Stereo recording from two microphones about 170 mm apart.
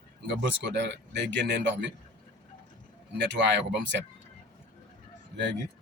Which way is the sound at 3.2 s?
90° right.